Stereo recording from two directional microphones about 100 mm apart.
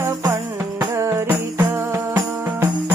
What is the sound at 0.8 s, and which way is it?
Music, 30° right (ahead or behind).